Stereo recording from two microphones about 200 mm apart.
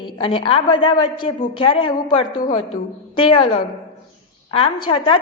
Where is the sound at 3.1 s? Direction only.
25° left (ahead or behind).